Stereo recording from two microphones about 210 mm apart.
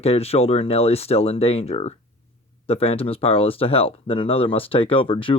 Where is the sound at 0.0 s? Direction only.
30° left (ahead or behind).